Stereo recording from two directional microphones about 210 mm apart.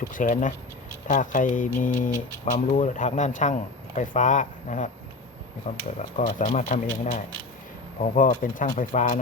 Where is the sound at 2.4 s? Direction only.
35° left (ahead or behind).